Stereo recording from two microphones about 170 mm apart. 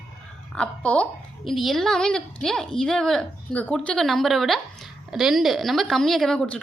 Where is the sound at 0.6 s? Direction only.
5° left (ahead or behind).